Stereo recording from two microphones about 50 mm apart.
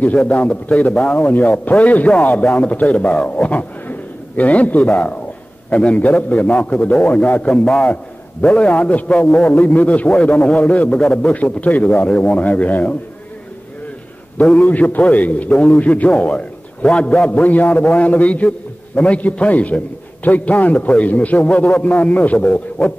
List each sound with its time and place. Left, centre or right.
0.0 s a man's voice: left
11.0 s a man's voice: centre
11.3 s a man's voice: left
14.6 s a man's voice: left
17.3 s a man's voice: left